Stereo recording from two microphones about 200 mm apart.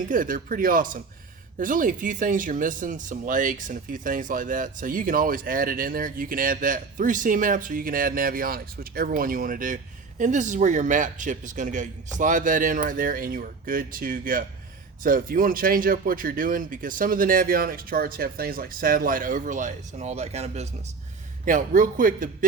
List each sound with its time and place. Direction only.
0.1 s a man's voice: 40° right (ahead or behind)